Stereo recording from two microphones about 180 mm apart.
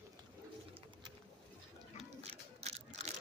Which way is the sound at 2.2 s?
35° right (ahead or behind).